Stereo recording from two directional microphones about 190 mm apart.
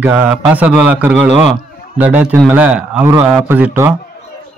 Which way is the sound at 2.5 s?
5° right (ahead or behind).